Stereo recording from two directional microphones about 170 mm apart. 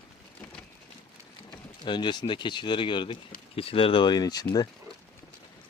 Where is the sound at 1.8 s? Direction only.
25° left (ahead or behind).